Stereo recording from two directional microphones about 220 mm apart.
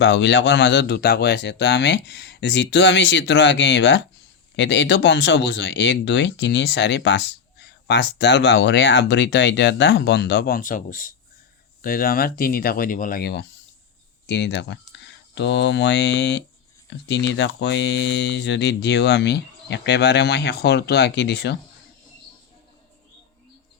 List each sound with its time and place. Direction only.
0.0 s speech: 55° left (ahead or behind)